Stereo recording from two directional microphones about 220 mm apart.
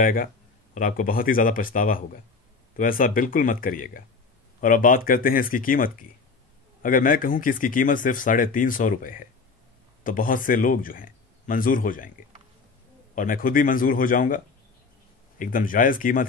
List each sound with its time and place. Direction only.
0.0 s speech: 40° left (ahead or behind)
13.1 s speech: 35° left (ahead or behind)